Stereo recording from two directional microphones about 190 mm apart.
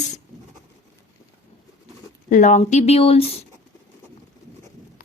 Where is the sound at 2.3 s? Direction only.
40° left (ahead or behind).